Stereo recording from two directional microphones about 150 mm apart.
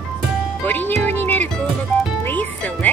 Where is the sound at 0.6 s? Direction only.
15° left (ahead or behind).